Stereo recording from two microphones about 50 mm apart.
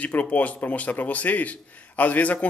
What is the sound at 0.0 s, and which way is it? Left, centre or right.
A man's voice, left.